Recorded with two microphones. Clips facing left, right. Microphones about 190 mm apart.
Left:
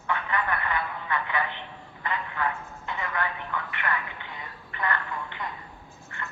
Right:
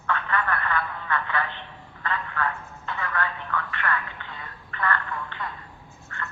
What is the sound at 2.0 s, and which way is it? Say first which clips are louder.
Telephone: right 1 dB; 15° left (ahead or behind).